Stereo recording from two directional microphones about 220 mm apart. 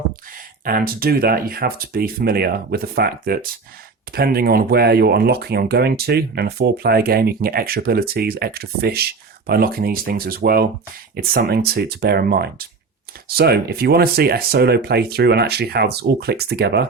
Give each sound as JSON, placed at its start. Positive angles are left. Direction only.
{"t": 0.6, "sound": "speech", "side_deg": -40}